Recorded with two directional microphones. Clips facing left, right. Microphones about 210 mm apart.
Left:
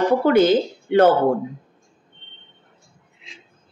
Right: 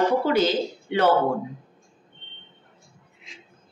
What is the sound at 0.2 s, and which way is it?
Speech, 55° left (ahead or behind).